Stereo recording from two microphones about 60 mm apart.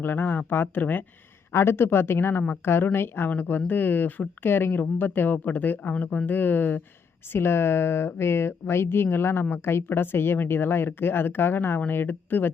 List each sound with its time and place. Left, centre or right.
0.0 s speech: left
1.5 s speech: left
7.3 s speech: left